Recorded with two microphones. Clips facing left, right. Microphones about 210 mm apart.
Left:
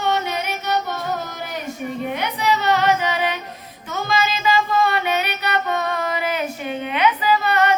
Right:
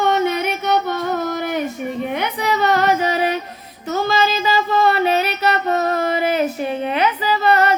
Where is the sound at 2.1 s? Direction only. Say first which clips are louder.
Even; 50° right (ahead or behind).